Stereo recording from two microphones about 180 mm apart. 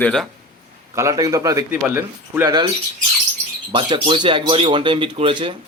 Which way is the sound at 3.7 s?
25° right (ahead or behind).